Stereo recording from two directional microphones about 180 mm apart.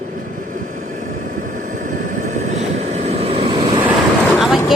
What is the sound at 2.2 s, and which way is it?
Vehicle, 40° right (ahead or behind).